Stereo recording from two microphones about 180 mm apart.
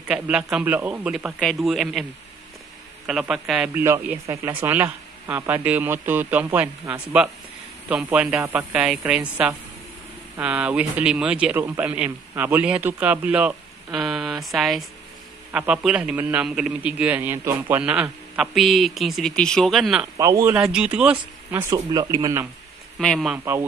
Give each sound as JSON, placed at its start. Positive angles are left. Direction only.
{"t": 0.1, "sound": "a man's voice", "side_deg": -5}
{"t": 3.1, "sound": "a man's voice", "side_deg": -5}
{"t": 20.2, "sound": "a man's voice", "side_deg": -15}
{"t": 20.5, "sound": "a man's voice", "side_deg": -5}
{"t": 22.9, "sound": "a man's voice", "side_deg": 0}